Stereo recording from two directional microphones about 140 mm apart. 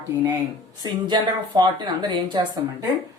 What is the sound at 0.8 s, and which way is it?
Speech, 30° right (ahead or behind).